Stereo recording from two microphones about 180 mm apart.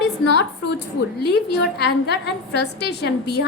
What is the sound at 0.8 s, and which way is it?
A woman's voice, 65° left (ahead or behind).